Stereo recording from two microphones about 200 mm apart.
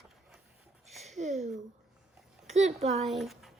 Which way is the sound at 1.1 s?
35° right (ahead or behind).